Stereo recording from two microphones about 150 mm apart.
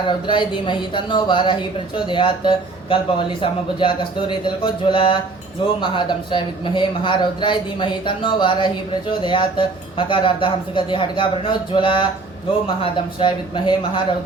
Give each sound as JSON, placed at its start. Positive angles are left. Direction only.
{"t": 0.1, "sound": "speech", "side_deg": 30}